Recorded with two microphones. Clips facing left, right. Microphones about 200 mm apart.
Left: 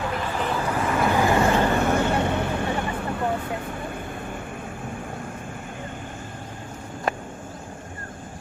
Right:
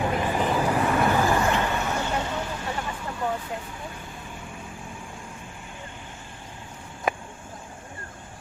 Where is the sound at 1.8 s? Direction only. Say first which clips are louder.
Left 6 dB; 55° left (ahead or behind).